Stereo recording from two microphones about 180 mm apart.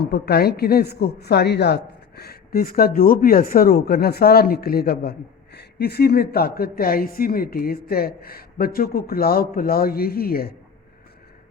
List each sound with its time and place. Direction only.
0.1 s a woman's voice: 60° left (ahead or behind)